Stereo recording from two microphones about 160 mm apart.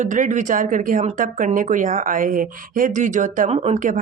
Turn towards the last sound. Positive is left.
turn(degrees=-55)  # may be behind; listen again after turning